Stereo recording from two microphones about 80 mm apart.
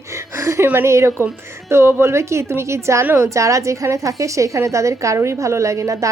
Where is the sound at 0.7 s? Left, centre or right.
Right.